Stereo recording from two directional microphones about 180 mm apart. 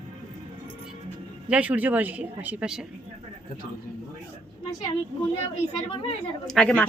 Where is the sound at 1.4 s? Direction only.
5° right (ahead or behind).